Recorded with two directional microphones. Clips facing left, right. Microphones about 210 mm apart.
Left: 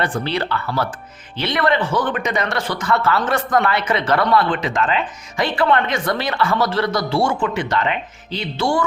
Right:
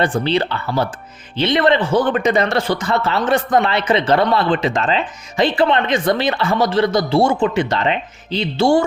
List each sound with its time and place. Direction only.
0.0 s speech: 25° right (ahead or behind)